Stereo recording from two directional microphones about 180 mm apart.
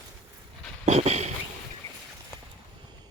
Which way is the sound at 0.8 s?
40° right (ahead or behind).